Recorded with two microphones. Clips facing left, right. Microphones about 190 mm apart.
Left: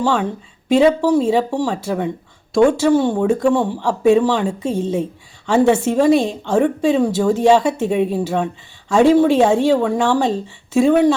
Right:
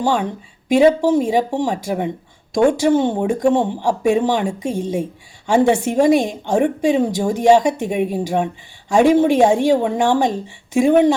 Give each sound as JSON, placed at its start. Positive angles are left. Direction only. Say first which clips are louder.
{"t": 0.0, "sound": "a woman's voice", "louder": "left 1 dB", "side_deg": -15}